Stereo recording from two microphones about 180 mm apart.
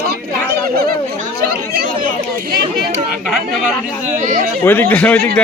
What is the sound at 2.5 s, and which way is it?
Speech, 50° right (ahead or behind).